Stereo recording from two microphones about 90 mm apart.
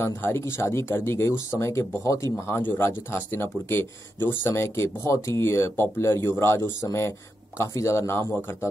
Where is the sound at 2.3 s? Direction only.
25° left (ahead or behind).